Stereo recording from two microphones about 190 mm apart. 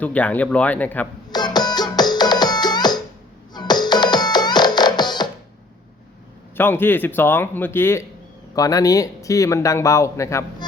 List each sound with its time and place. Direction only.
0.0 s speech: 10° left (ahead or behind)
1.3 s music: 20° left (ahead or behind)
6.6 s speech: 10° left (ahead or behind)